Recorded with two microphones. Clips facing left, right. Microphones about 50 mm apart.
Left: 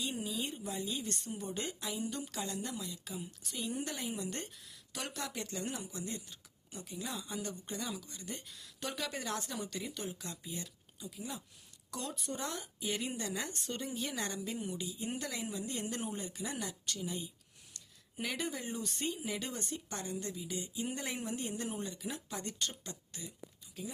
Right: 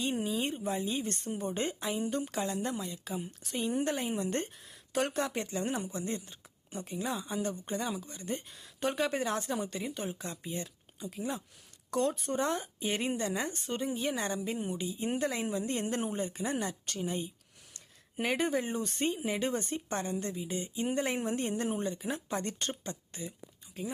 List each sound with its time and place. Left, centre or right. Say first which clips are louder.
0.0 s speech: right 6 dB; right